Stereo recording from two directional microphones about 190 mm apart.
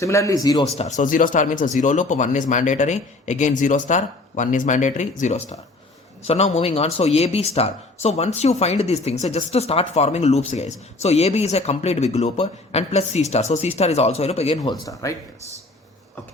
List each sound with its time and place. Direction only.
0.0 s speech: 15° left (ahead or behind)
0.8 s speech: 40° left (ahead or behind)
15.0 s speech: 15° left (ahead or behind)